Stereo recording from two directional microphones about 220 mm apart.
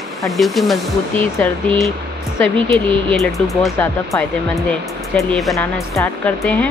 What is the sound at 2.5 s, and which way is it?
Speech, 25° right (ahead or behind).